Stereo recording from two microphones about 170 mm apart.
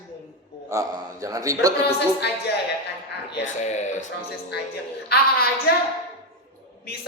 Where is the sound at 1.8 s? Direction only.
75° left (ahead or behind).